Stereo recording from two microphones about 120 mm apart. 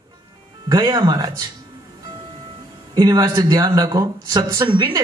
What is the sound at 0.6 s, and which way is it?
Speech, 35° right (ahead or behind).